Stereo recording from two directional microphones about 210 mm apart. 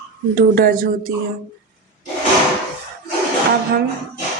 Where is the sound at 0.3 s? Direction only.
45° right (ahead or behind).